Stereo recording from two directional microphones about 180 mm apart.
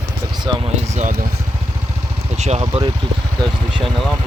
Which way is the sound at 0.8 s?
40° right (ahead or behind).